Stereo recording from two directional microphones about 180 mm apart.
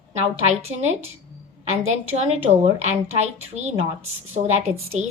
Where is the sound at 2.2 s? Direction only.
35° right (ahead or behind).